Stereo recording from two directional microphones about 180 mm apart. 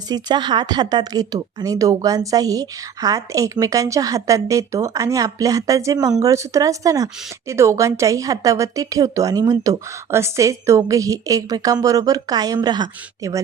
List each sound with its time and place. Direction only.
0.1 s a woman's voice: 25° right (ahead or behind)